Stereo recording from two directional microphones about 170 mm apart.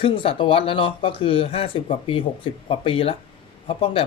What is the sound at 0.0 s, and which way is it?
Speech, 30° left (ahead or behind).